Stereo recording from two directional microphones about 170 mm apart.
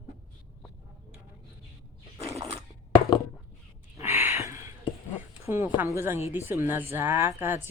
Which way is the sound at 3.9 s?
15° right (ahead or behind).